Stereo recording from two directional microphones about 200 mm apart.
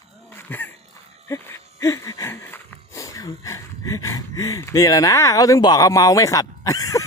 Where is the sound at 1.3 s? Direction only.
15° left (ahead or behind).